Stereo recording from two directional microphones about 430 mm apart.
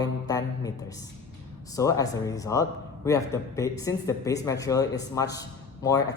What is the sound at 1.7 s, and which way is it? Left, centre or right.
A man's voice, centre.